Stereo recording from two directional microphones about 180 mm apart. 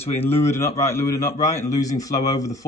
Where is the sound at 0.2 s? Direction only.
15° left (ahead or behind).